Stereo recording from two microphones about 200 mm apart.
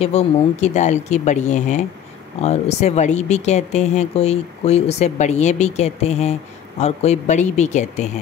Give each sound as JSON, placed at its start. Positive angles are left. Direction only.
{"t": 0.0, "sound": "speech", "side_deg": 35}